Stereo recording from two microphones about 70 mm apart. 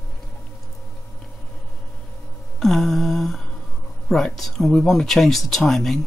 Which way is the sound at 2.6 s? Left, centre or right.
Centre.